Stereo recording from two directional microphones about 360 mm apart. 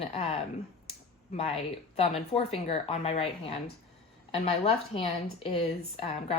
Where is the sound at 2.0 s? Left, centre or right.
Centre.